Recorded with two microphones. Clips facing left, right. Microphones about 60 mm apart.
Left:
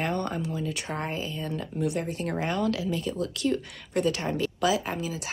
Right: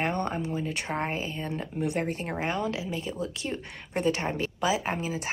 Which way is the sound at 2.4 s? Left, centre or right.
Right.